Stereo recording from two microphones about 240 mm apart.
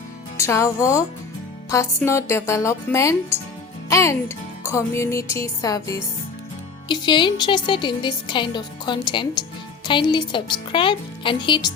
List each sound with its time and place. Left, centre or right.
0.3 s a woman's voice: centre